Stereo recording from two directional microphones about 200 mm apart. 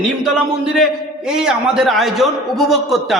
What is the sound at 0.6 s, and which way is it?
A man's voice, 5° right (ahead or behind).